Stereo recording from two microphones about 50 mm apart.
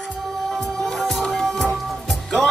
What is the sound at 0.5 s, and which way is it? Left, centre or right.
Music, centre.